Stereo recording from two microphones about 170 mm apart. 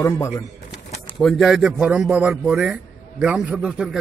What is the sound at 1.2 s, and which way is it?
A man's voice, centre (ahead or behind).